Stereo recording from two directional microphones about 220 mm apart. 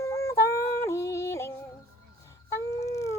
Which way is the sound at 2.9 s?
15° left (ahead or behind).